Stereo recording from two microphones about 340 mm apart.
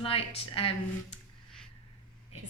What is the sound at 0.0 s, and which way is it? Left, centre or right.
Speech, centre.